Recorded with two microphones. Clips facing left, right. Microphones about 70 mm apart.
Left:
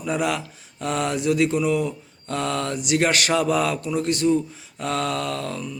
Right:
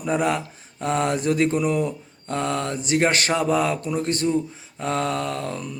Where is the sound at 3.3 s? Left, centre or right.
Right.